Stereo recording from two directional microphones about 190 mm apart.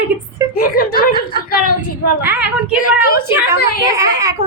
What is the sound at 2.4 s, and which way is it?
A woman's voice, 50° left (ahead or behind).